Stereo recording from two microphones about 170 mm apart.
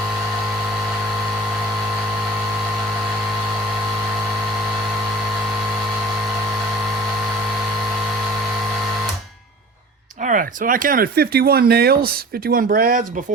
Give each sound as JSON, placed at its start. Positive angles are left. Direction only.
{"t": 10.2, "sound": "speech", "side_deg": -50}